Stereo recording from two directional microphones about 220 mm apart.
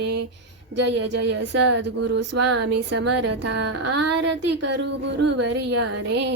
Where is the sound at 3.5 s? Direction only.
90° right.